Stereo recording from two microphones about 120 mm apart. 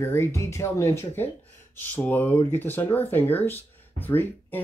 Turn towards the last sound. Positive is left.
turn(degrees=15)  # may be behind; listen again after turning